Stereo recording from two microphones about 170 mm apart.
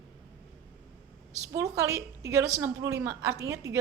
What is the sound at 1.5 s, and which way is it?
A woman's voice, 20° right (ahead or behind).